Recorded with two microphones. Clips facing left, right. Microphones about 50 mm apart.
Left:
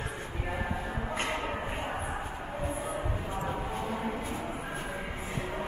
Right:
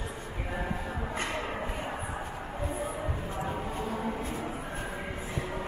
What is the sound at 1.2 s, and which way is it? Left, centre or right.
Shuffle, left.